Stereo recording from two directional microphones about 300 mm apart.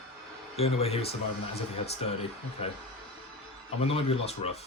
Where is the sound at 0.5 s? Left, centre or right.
Centre.